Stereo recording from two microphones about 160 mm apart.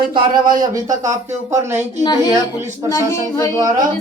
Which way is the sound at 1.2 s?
15° right (ahead or behind).